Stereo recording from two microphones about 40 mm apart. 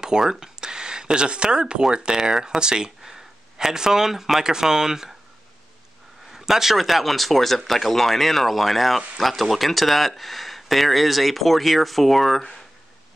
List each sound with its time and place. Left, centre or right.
0.2 s speech: centre
6.3 s speech: centre